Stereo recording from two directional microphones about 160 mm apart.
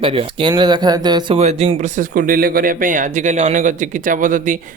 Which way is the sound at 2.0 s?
60° right (ahead or behind).